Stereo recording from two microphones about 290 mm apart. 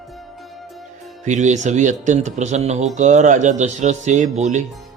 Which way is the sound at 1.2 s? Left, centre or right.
Right.